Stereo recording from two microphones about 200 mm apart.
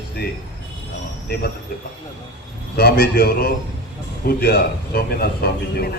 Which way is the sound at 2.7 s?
50° left (ahead or behind).